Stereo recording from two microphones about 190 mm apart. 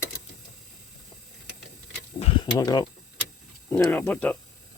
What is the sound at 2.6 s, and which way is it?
Speech, 20° left (ahead or behind).